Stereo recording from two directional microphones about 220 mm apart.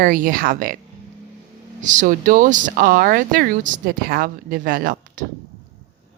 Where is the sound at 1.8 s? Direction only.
35° right (ahead or behind).